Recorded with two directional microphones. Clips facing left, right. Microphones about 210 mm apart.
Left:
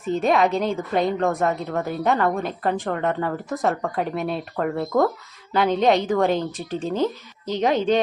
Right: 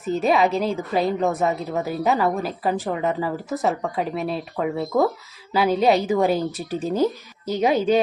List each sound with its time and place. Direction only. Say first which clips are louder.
0.0 s a woman's voice: even; 5° right (ahead or behind)